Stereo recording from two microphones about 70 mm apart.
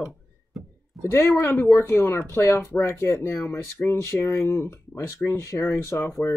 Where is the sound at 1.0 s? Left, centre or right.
Left.